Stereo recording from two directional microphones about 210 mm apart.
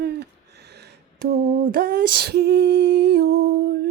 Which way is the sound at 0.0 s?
50° right (ahead or behind).